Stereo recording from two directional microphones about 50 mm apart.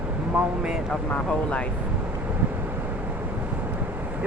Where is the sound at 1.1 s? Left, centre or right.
Left.